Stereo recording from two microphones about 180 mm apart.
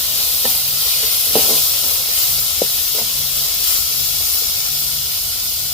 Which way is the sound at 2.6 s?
30° left (ahead or behind).